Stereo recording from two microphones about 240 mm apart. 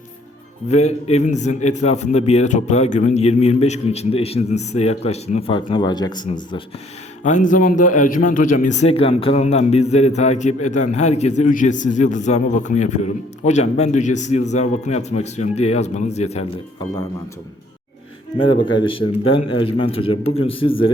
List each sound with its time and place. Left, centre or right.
0.7 s a man's voice: left
7.3 s a man's voice: left
18.3 s a man's voice: centre